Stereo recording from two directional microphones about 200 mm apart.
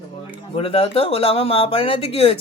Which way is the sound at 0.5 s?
30° left (ahead or behind).